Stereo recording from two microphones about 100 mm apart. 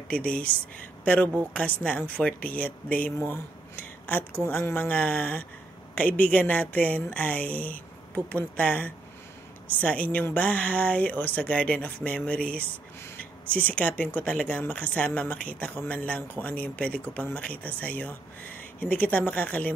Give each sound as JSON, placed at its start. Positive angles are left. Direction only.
{"t": 0.1, "sound": "speech", "side_deg": 10}
{"t": 3.3, "sound": "a sound", "side_deg": 20}
{"t": 4.5, "sound": "speech", "side_deg": 20}